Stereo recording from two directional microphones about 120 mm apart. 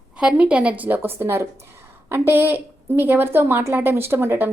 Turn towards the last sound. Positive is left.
turn(degrees=-15)  # may be behind; listen again after turning